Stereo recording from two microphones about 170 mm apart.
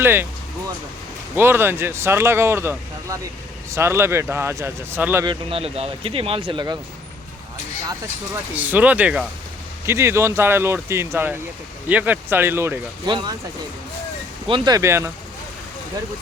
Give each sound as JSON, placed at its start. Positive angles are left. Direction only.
{"t": 0.0, "sound": "speech", "side_deg": -15}
{"t": 1.4, "sound": "speech", "side_deg": -15}
{"t": 5.2, "sound": "speech", "side_deg": -30}
{"t": 8.5, "sound": "speech", "side_deg": -10}
{"t": 13.1, "sound": "speech", "side_deg": -25}
{"t": 14.4, "sound": "speech", "side_deg": -25}